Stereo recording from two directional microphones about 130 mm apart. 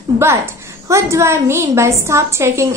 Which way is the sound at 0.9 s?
20° right (ahead or behind).